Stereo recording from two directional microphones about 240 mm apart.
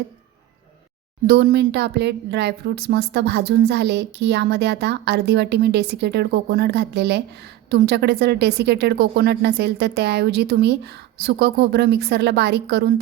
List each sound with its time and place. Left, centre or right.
1.3 s a woman's voice: right